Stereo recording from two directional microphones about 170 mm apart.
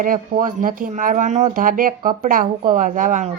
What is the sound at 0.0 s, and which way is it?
Speech, 50° right (ahead or behind).